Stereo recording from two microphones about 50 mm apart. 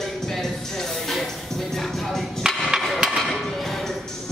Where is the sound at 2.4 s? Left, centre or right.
Centre.